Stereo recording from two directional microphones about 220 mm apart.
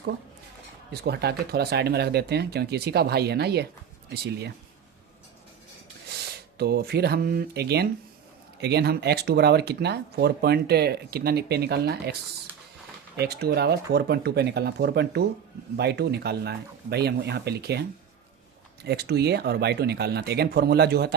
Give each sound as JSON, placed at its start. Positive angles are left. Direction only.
{"t": 0.9, "sound": "speech", "side_deg": -50}
{"t": 6.1, "sound": "speech", "side_deg": -50}
{"t": 13.1, "sound": "speech", "side_deg": -45}